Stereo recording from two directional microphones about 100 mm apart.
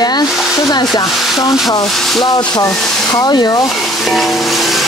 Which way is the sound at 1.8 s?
Centre (ahead or behind).